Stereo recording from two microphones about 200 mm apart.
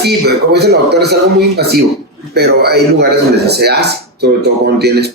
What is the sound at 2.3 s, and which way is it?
Speech, 55° right (ahead or behind).